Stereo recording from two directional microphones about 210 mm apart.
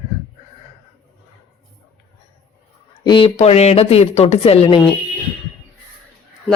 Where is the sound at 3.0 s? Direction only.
25° left (ahead or behind).